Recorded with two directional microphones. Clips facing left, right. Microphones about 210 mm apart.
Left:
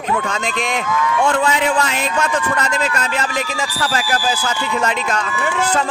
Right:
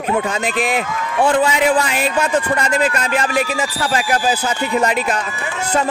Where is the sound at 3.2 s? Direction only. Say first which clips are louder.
Right 3 dB; 10° right (ahead or behind).